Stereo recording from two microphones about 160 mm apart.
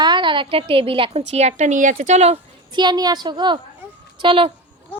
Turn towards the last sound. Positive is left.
turn(degrees=-35)  # may be behind; listen again after turning